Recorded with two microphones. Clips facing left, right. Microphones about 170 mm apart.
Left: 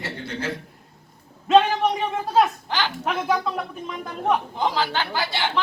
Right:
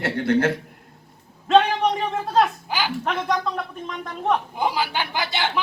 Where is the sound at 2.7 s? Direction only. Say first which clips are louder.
Even; 10° right (ahead or behind).